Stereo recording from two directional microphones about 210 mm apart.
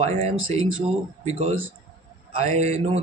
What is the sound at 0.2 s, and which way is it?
Speech, 25° right (ahead or behind).